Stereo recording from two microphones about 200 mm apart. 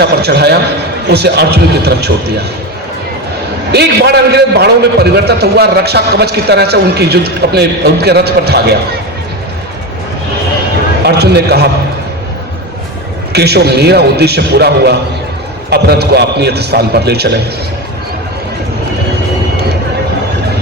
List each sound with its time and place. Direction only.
0.0 s a man's voice: 55° right (ahead or behind)
3.7 s a man's voice: 55° right (ahead or behind)
11.0 s a man's voice: 55° right (ahead or behind)
13.3 s a man's voice: 55° right (ahead or behind)